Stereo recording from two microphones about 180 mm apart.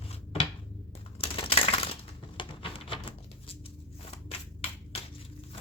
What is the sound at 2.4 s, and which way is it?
Patter, 30° left (ahead or behind).